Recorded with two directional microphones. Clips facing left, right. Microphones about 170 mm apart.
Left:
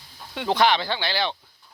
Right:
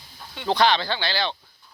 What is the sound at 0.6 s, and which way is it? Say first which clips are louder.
Speech: even; 15° left (ahead or behind).